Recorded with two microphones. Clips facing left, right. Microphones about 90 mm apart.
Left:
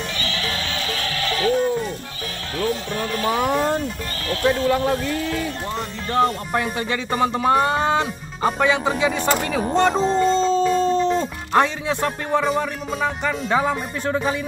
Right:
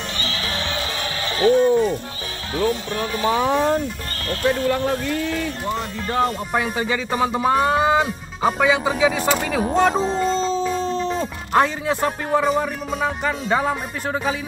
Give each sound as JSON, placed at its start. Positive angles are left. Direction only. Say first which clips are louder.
{"t": 0.2, "sound": "music", "louder": "right 2 dB", "side_deg": -25}
{"t": 3.0, "sound": "speech", "louder": "right 1 dB", "side_deg": -15}
{"t": 3.3, "sound": "music", "louder": "right 2 dB", "side_deg": 5}